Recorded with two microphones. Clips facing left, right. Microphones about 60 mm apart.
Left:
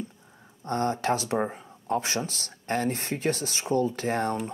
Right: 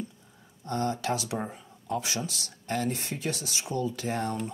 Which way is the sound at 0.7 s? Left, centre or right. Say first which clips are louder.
Left 3 dB; left.